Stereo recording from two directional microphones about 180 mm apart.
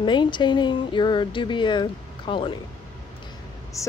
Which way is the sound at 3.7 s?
15° left (ahead or behind).